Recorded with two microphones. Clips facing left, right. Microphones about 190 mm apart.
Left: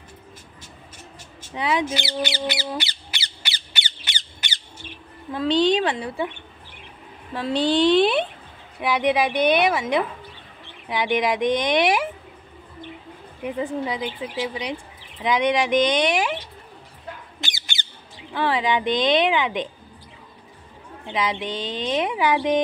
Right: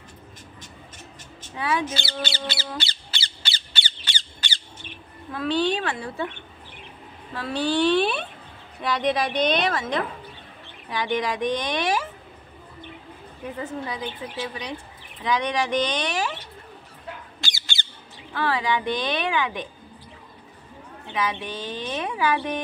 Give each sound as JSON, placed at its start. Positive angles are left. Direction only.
{"t": 1.4, "sound": "a sound", "side_deg": 15}
{"t": 5.3, "sound": "a woman's voice", "side_deg": 20}
{"t": 7.3, "sound": "speech", "side_deg": 20}
{"t": 13.4, "sound": "speech", "side_deg": 15}
{"t": 17.4, "sound": "squawk", "side_deg": 20}
{"t": 18.3, "sound": "a woman's voice", "side_deg": 20}
{"t": 21.1, "sound": "speech", "side_deg": 15}